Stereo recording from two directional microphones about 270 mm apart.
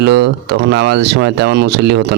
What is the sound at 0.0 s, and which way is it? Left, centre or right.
Speech, right.